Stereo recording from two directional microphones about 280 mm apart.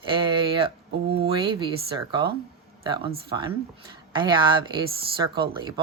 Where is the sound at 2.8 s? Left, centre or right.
Centre.